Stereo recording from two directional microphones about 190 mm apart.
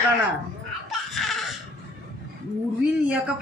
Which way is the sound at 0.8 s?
Centre (ahead or behind).